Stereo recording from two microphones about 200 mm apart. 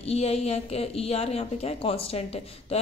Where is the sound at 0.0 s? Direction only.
30° left (ahead or behind).